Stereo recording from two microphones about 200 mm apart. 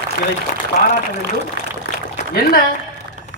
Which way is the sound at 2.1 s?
50° left (ahead or behind).